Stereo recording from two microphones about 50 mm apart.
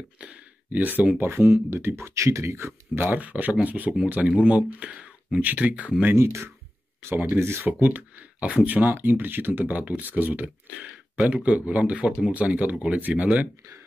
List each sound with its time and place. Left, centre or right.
0.2 s a sound: right
0.7 s speech: right
1.1 s speech: right
2.9 s speech: right
6.1 s speech: right
7.8 s speech: right
8.9 s speech: right